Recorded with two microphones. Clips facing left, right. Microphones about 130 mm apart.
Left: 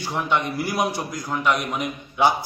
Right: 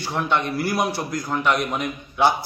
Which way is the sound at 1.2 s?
Centre (ahead or behind).